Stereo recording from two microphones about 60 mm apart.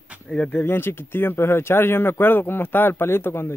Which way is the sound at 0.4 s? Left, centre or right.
Left.